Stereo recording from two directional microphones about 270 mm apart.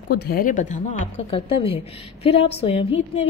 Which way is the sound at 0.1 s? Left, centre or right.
Left.